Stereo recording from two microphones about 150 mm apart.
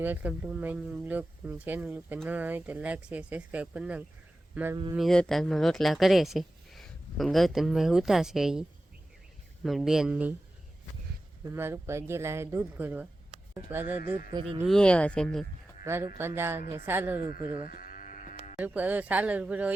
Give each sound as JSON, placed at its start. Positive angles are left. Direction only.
{"t": 0.0, "sound": "speech", "side_deg": -10}
{"t": 4.9, "sound": "speech", "side_deg": 5}
{"t": 9.6, "sound": "speech", "side_deg": 0}
{"t": 11.4, "sound": "speech", "side_deg": -15}
{"t": 14.7, "sound": "speech", "side_deg": 5}
{"t": 15.8, "sound": "speech", "side_deg": -20}
{"t": 17.8, "sound": "sheep", "side_deg": 65}
{"t": 18.6, "sound": "speech", "side_deg": -10}